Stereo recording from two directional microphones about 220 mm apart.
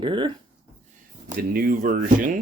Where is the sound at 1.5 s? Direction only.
40° right (ahead or behind).